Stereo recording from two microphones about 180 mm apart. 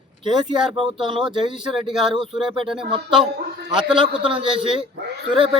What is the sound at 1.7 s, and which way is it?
Speech, centre (ahead or behind).